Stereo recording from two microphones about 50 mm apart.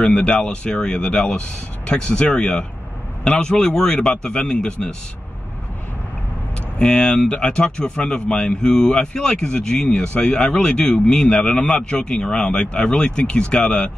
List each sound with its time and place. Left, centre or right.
0.0 s speech: left
6.8 s speech: centre
10.1 s speech: left